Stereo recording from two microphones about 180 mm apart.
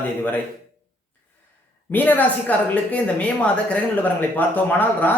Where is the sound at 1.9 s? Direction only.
10° left (ahead or behind).